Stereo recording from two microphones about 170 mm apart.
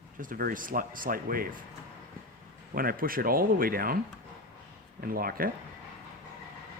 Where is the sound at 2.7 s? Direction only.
55° right (ahead or behind).